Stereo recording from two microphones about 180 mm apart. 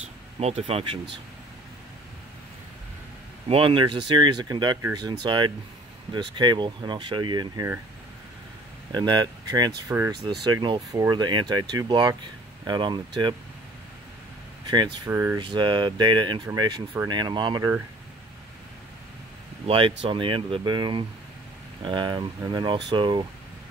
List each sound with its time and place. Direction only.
0.4 s speech: 35° right (ahead or behind)
3.4 s speech: 30° right (ahead or behind)
8.9 s speech: 25° right (ahead or behind)
15.0 s speech: 15° right (ahead or behind)
15.4 s speech: 25° right (ahead or behind)
19.6 s speech: 30° right (ahead or behind)